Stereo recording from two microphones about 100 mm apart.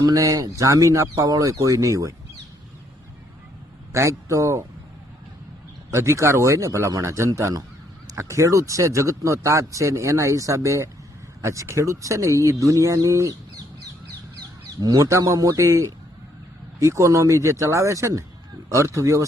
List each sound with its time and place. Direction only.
0.0 s speech: 35° right (ahead or behind)
3.9 s speech: 30° right (ahead or behind)
5.9 s speech: 25° right (ahead or behind)
14.8 s speech: 40° right (ahead or behind)